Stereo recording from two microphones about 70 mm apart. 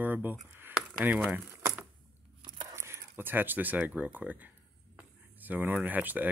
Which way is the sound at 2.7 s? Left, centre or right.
Right.